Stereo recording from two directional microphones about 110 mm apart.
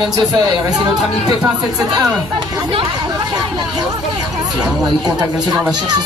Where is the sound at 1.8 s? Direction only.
35° right (ahead or behind).